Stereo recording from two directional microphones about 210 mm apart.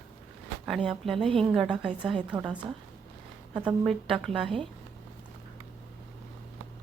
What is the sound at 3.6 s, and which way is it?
A woman's voice, centre (ahead or behind).